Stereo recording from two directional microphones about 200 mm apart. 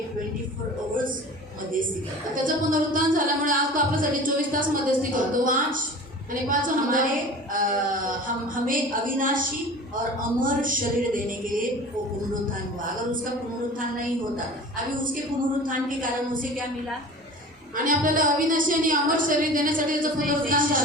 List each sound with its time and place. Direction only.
2.3 s speech: 40° right (ahead or behind)
15.6 s speech: 45° right (ahead or behind)
17.8 s speech: 40° right (ahead or behind)